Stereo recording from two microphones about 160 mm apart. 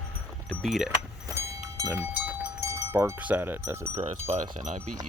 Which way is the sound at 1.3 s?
15° right (ahead or behind).